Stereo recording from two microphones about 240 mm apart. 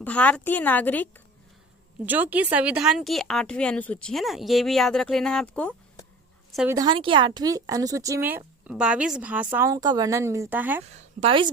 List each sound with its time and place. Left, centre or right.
0.0 s a woman's voice: centre
2.0 s a woman's voice: centre
6.7 s speech: centre
11.2 s speech: right